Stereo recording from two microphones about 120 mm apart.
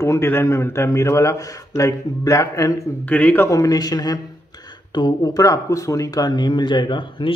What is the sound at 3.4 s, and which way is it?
Speech, 30° left (ahead or behind).